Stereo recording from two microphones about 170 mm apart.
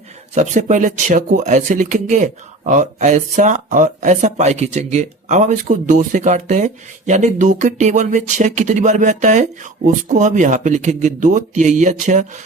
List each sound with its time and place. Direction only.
0.3 s speech: 45° right (ahead or behind)